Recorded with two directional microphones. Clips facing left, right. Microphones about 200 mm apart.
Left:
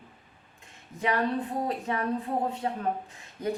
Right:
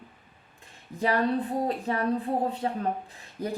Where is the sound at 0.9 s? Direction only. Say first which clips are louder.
Right 2 dB; 35° right (ahead or behind).